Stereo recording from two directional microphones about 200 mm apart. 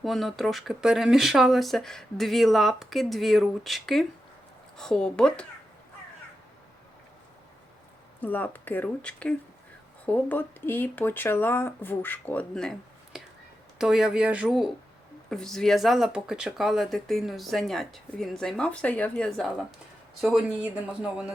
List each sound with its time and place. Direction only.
0.0 s speech: centre (ahead or behind)
8.2 s speech: 10° left (ahead or behind)
13.7 s speech: centre (ahead or behind)